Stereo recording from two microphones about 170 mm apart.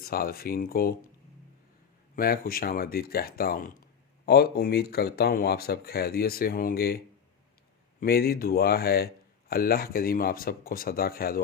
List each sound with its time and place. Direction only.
0.0 s speech: 60° left (ahead or behind)
2.1 s speech: 60° left (ahead or behind)
8.0 s speech: 65° left (ahead or behind)